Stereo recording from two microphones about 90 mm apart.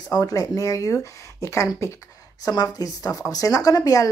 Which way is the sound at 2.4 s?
45° left (ahead or behind).